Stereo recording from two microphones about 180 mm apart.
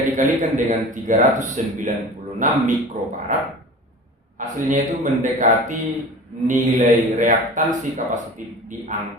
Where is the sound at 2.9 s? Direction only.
45° right (ahead or behind).